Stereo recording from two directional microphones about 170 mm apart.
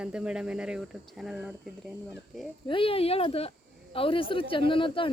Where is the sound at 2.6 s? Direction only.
30° left (ahead or behind).